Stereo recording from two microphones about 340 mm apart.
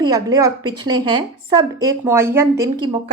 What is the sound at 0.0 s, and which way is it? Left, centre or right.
A woman's voice, centre.